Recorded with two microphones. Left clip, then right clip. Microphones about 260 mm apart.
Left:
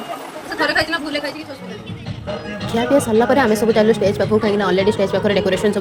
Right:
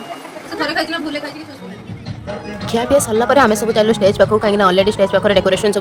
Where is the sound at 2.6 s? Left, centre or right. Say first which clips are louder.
Right 2 dB; right.